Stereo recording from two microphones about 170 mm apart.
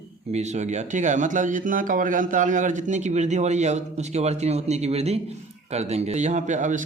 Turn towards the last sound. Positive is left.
turn(degrees=-45)  # may be behind; listen again after turning